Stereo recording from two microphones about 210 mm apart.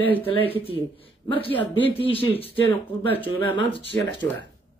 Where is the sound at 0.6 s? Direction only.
25° left (ahead or behind).